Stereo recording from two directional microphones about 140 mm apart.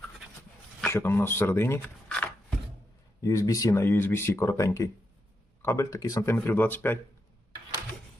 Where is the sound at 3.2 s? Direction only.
25° left (ahead or behind).